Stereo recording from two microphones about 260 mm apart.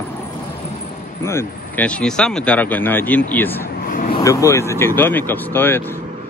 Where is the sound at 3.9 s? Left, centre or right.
Left.